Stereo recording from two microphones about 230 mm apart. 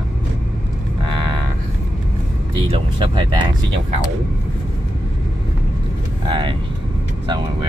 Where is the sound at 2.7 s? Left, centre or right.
Centre.